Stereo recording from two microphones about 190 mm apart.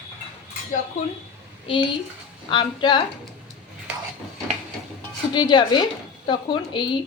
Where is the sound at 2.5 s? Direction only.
25° left (ahead or behind).